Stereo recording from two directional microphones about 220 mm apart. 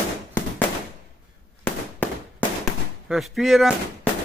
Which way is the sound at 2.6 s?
Centre (ahead or behind).